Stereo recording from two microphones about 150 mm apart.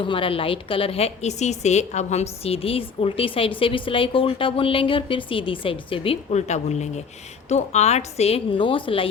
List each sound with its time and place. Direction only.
0.0 s a woman's voice: 35° left (ahead or behind)